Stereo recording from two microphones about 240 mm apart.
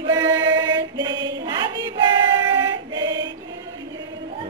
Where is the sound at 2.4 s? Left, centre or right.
Centre.